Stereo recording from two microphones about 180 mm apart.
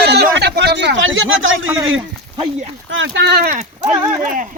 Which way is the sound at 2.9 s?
75° right (ahead or behind).